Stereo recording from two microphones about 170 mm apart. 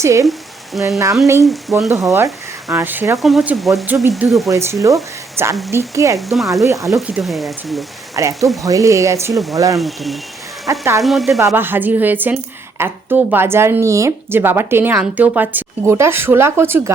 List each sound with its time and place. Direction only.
0.0 s a woman's voice: 15° right (ahead or behind)
2.1 s a woman's voice: 20° right (ahead or behind)
4.1 s speech: centre (ahead or behind)
4.4 s a woman's voice: 15° right (ahead or behind)
6.1 s speech: centre (ahead or behind)
8.1 s speech: 20° right (ahead or behind)
9.7 s speech: centre (ahead or behind)
10.7 s speech: 20° right (ahead or behind)
11.0 s speech: centre (ahead or behind)
11.3 s a woman's voice: 15° right (ahead or behind)